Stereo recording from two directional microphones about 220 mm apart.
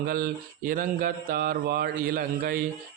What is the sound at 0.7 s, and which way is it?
A man's voice, 40° right (ahead or behind).